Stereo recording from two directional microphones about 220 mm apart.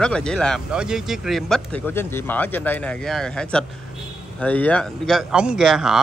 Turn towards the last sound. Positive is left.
turn(degrees=0)  # may be behind; listen again after turning